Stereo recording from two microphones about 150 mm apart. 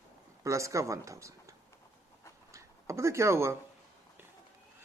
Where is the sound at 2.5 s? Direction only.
20° right (ahead or behind).